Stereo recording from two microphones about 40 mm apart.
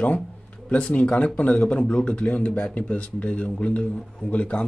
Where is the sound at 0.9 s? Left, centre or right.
Left.